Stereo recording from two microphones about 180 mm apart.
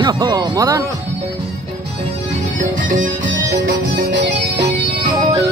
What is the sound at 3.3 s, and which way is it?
Music, 60° right (ahead or behind).